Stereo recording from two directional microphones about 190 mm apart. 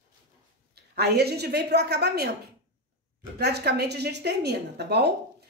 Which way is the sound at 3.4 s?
60° right (ahead or behind).